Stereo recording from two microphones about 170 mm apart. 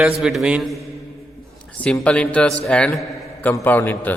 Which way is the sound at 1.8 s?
5° left (ahead or behind).